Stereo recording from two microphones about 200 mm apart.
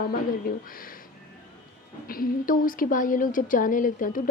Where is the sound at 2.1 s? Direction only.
45° left (ahead or behind).